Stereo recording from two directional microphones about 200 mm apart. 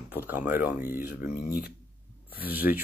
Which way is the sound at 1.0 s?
50° left (ahead or behind).